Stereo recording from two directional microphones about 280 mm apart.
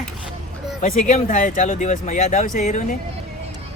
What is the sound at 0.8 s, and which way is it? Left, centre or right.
Speech, left.